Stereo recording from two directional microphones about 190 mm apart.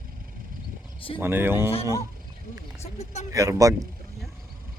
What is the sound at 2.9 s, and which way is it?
Speech, 35° left (ahead or behind).